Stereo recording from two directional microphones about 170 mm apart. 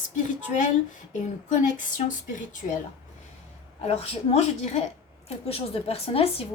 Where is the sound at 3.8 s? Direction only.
35° left (ahead or behind).